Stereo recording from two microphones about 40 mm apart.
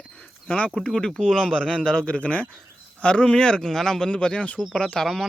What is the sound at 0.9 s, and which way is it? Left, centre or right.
Speech, centre.